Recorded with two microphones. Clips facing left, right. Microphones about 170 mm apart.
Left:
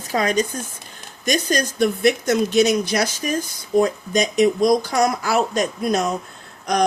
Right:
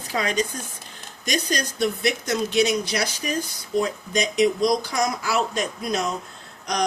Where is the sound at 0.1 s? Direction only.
45° left (ahead or behind).